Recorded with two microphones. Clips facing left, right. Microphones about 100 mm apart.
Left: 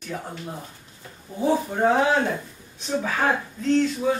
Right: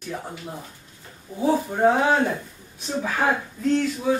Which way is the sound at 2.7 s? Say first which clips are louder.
Even; 5° right (ahead or behind).